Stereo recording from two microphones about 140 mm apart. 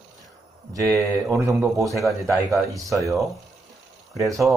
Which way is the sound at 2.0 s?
20° right (ahead or behind).